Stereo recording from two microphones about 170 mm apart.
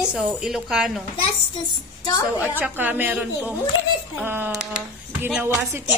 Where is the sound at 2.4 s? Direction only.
10° right (ahead or behind).